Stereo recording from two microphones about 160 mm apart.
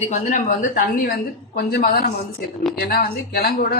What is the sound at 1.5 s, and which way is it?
Speech, 75° left (ahead or behind).